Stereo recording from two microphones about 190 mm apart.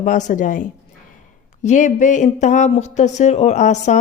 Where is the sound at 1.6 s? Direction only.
40° left (ahead or behind).